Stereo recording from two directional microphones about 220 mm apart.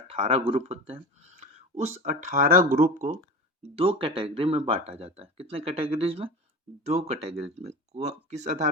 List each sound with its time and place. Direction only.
0.1 s speech: 25° right (ahead or behind)
3.6 s speech: 25° right (ahead or behind)